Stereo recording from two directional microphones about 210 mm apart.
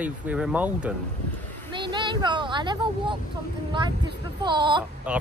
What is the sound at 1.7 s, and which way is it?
Speech, 20° right (ahead or behind).